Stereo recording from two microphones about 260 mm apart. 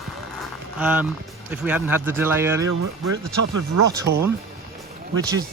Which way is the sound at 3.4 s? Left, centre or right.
Right.